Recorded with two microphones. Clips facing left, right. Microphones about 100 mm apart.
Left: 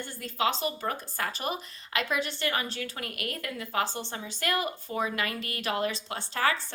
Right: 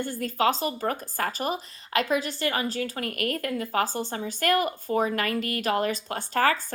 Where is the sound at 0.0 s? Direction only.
45° right (ahead or behind).